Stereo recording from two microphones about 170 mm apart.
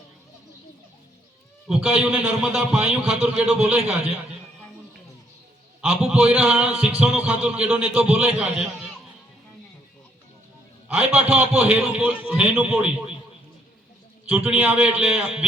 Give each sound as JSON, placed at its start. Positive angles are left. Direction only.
{"t": 1.6, "sound": "a man's voice", "side_deg": -5}
{"t": 6.0, "sound": "a man's voice", "side_deg": -5}
{"t": 10.8, "sound": "a man's voice", "side_deg": -10}
{"t": 14.3, "sound": "a man's voice", "side_deg": -10}